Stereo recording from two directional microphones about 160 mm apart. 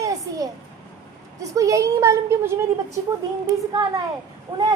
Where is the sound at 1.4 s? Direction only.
20° right (ahead or behind).